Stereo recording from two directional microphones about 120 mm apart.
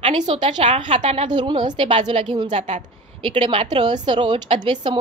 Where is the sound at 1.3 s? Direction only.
40° right (ahead or behind).